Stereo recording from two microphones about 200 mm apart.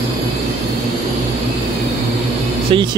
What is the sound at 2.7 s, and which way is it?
Speech, 25° right (ahead or behind).